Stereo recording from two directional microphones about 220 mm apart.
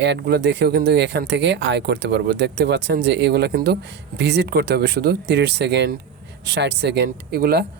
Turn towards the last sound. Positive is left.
turn(degrees=-45)  # may be behind; listen again after turning